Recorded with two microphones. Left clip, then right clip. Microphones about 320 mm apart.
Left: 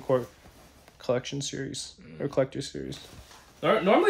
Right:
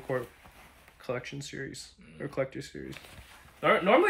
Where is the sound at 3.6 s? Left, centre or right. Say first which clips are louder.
Left 1 dB; centre.